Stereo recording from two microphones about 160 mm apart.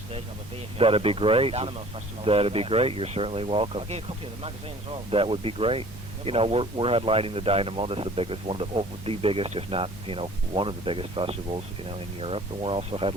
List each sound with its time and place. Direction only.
0.8 s speech: 35° right (ahead or behind)
5.1 s speech: 35° right (ahead or behind)